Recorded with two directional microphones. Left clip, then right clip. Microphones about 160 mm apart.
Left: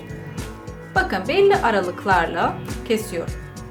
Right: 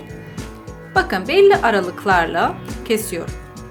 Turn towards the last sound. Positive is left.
turn(degrees=-55)  # may be behind; listen again after turning